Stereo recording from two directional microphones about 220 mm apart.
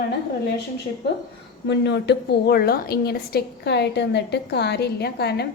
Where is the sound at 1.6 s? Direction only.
50° left (ahead or behind).